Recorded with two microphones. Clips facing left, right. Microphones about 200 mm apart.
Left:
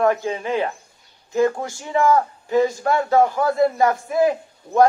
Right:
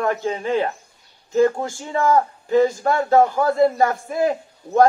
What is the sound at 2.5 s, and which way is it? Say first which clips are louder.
A man's voice: right 1 dB; 45° right (ahead or behind).